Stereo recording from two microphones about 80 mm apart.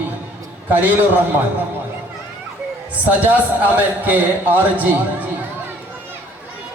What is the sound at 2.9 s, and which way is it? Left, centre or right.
A man's voice, centre.